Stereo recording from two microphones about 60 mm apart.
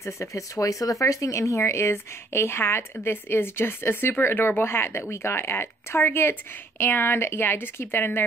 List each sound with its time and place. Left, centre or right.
0.0 s speech: left